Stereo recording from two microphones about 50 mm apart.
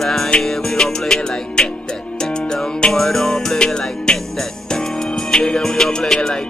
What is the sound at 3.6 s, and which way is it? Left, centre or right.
Music, centre.